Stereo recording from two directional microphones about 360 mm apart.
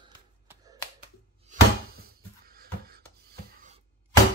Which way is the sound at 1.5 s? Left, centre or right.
Centre.